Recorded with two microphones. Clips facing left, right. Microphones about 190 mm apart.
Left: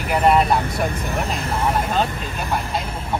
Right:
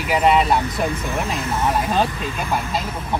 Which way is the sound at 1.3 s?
30° left (ahead or behind).